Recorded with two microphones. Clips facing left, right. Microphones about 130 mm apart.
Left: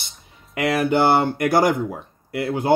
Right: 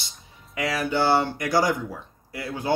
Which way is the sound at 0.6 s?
55° left (ahead or behind).